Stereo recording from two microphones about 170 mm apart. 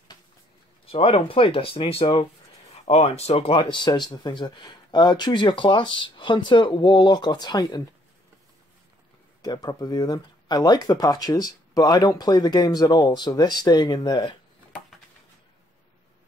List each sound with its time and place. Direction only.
0.9 s speech: 30° left (ahead or behind)
9.4 s speech: 25° left (ahead or behind)